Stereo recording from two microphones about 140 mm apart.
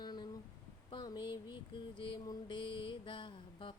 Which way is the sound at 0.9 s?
30° left (ahead or behind).